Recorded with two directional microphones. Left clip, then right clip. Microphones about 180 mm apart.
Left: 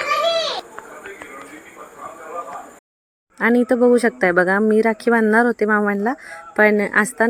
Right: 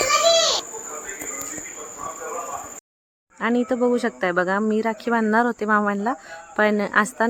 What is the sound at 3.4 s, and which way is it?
Speech, 25° left (ahead or behind).